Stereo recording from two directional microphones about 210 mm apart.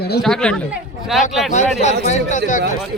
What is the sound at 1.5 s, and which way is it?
Speech, 35° left (ahead or behind).